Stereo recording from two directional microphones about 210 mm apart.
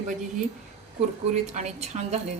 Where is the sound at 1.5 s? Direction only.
35° right (ahead or behind).